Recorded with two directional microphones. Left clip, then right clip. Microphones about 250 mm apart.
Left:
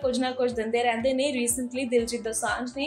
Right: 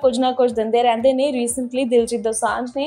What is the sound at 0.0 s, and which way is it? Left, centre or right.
A woman's voice, right.